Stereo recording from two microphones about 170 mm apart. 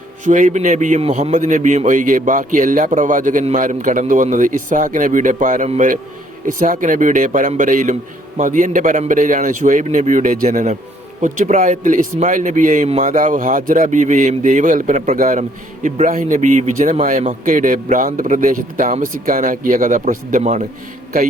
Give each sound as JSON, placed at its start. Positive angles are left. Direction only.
{"t": 0.3, "sound": "speech", "side_deg": -50}